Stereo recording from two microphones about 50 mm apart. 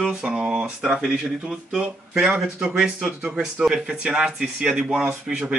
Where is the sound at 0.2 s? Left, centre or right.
Centre.